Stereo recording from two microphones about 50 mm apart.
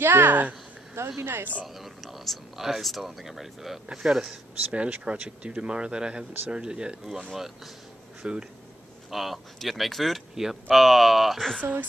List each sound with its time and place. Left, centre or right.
0.0 s speech: right
0.9 s speech: right
1.8 s speech: centre
4.7 s speech: right; by 7.7 s centre
8.2 s speech: right
9.1 s speech: centre